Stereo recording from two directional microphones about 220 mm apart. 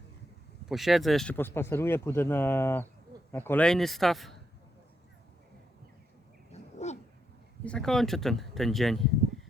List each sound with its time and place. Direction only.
0.6 s speech: centre (ahead or behind)
6.5 s a sound: 30° left (ahead or behind)
7.6 s speech: 5° left (ahead or behind)